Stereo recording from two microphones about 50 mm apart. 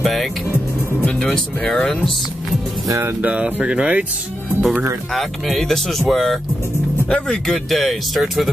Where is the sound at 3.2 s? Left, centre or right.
Right.